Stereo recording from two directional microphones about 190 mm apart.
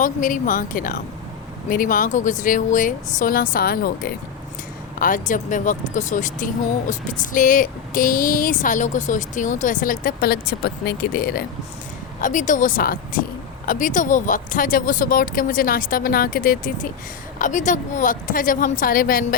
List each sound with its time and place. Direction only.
0.0 s speech: 45° left (ahead or behind)
12.2 s speech: 40° left (ahead or behind)